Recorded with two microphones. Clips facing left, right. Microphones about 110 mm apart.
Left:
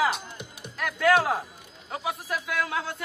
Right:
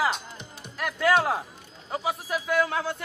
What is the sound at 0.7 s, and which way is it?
A man's voice, 5° right (ahead or behind).